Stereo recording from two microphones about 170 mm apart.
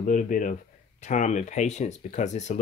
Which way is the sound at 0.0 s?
50° left (ahead or behind).